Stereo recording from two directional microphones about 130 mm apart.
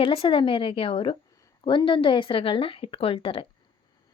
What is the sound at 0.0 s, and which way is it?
Speech, 45° left (ahead or behind).